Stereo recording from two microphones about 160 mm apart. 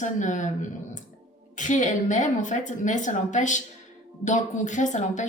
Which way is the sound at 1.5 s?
50° left (ahead or behind).